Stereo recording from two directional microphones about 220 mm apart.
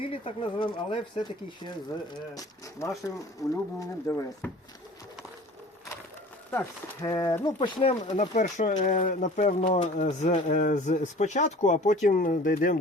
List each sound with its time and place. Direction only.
0.0 s speech: 25° left (ahead or behind)
7.0 s speech: 20° left (ahead or behind); by 12.7 s 40° left (ahead or behind)